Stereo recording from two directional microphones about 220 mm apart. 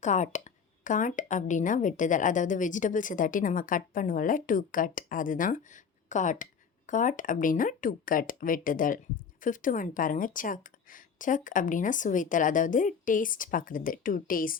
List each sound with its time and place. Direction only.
0.0 s speech: 35° left (ahead or behind)